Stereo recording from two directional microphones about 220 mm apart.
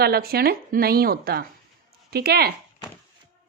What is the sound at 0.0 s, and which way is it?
A woman's voice, 45° right (ahead or behind).